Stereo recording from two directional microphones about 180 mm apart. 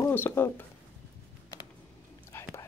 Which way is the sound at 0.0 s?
10° left (ahead or behind).